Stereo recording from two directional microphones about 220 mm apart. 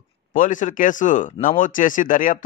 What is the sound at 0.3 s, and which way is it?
Speech, 35° left (ahead or behind).